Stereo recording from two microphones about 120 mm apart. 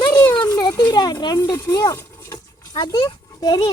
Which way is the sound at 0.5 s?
35° left (ahead or behind).